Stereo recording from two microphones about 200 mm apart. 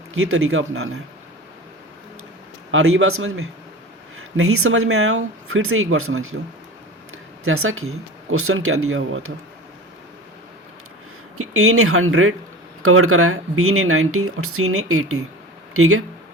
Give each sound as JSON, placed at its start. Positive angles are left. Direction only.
{"t": 0.1, "sound": "speech", "side_deg": -90}
{"t": 2.7, "sound": "speech", "side_deg": -85}
{"t": 7.4, "sound": "speech", "side_deg": -90}
{"t": 11.3, "sound": "speech", "side_deg": -90}